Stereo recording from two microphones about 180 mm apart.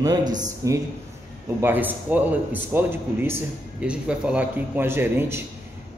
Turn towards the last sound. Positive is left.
turn(degrees=-10)  # may be behind; listen again after turning